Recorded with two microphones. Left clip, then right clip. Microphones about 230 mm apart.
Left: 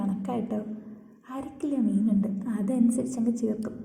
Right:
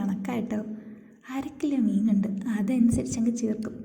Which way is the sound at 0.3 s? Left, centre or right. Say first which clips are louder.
Even; right.